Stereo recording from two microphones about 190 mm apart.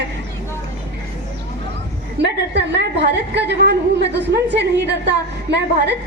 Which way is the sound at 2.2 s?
60° right (ahead or behind).